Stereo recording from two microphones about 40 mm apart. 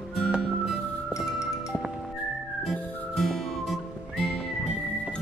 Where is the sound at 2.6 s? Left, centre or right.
Centre.